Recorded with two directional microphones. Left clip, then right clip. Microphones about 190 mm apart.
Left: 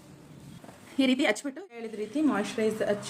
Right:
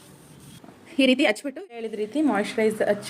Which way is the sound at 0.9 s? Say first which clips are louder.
Right 6 dB; 25° right (ahead or behind).